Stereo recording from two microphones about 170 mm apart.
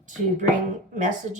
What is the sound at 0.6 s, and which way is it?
Speech, 45° right (ahead or behind).